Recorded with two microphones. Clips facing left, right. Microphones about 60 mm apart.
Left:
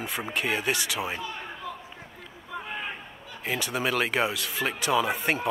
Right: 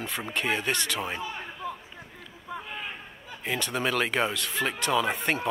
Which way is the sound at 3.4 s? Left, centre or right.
Centre.